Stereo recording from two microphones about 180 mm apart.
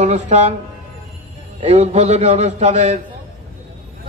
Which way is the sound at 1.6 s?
35° right (ahead or behind).